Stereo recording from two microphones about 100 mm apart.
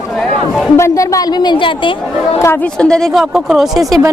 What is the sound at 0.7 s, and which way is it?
A woman's voice, 30° left (ahead or behind).